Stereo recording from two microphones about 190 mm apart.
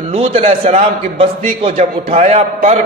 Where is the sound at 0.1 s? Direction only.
30° right (ahead or behind).